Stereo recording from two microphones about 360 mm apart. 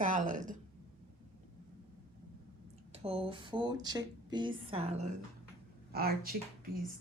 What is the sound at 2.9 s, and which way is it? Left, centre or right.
Speech, centre.